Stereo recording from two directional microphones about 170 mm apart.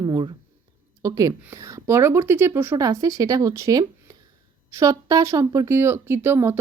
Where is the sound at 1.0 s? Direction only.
20° right (ahead or behind).